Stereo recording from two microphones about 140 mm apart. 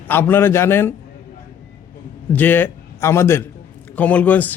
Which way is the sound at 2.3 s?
15° left (ahead or behind).